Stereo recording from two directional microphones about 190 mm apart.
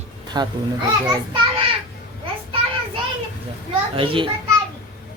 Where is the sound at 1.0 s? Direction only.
20° right (ahead or behind).